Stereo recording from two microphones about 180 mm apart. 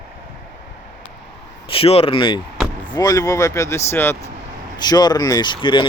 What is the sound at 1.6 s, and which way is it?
Speech, 30° left (ahead or behind).